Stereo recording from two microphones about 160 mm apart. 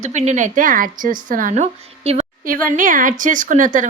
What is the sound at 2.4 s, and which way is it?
A woman's voice, 60° right (ahead or behind).